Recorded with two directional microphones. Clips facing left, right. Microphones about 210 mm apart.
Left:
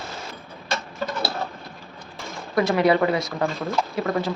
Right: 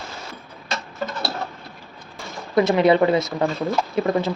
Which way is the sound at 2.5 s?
20° right (ahead or behind).